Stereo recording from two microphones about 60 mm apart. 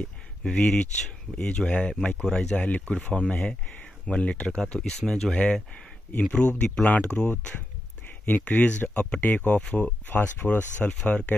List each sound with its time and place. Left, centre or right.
0.4 s speech: centre
2.5 s speech: left
8.3 s speech: left
10.0 s speech: left
11.1 s speech: left